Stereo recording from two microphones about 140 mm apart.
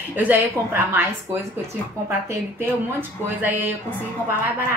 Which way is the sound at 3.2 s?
15° right (ahead or behind).